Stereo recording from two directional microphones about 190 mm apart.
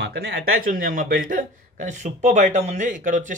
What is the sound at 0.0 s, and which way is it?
Speech, 60° right (ahead or behind).